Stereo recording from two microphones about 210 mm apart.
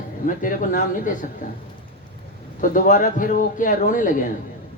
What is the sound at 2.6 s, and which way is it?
Speech, 40° left (ahead or behind).